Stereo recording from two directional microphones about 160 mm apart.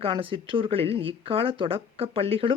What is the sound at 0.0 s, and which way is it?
Speech, 35° right (ahead or behind).